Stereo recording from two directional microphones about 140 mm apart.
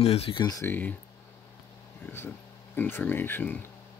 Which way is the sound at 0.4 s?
25° left (ahead or behind).